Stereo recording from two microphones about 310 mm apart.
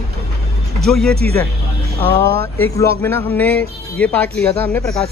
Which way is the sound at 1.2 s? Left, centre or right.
Centre.